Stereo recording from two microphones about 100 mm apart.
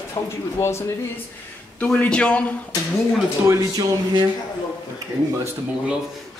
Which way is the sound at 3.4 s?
35° right (ahead or behind).